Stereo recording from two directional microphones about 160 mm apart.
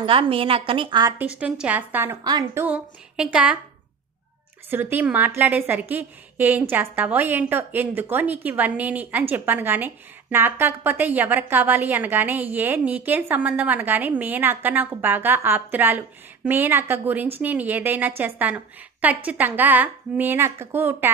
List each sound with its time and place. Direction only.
0.0 s a woman's voice: 35° right (ahead or behind)
1.1 s a woman's voice: 10° right (ahead or behind)
2.2 s a woman's voice: 25° right (ahead or behind)
2.6 s a woman's voice: 10° right (ahead or behind)
4.6 s a woman's voice: 10° right (ahead or behind)